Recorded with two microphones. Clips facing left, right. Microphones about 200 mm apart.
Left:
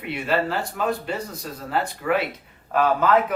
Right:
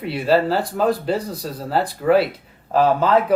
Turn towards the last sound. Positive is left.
turn(degrees=-30)  # may be behind; listen again after turning